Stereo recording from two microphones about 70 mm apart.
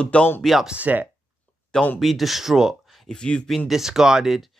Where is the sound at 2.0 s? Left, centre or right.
Centre.